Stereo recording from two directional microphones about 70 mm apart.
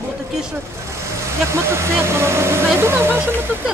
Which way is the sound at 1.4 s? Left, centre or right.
Right.